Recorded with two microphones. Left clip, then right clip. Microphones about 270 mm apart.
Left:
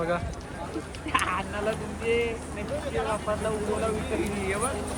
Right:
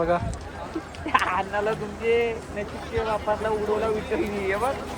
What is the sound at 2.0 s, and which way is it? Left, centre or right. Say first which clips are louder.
Speech: right 4 dB; right.